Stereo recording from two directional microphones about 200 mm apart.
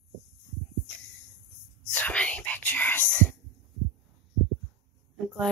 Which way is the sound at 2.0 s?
5° left (ahead or behind).